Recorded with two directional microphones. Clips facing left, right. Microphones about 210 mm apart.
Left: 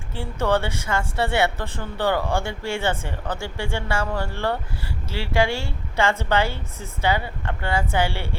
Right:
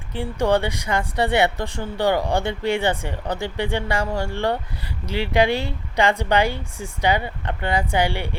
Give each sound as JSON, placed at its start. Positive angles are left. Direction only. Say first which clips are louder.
{"t": 0.1, "sound": "speech", "louder": "right 3 dB", "side_deg": -15}